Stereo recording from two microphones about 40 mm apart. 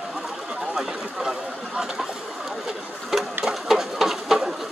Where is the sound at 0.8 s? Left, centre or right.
Centre.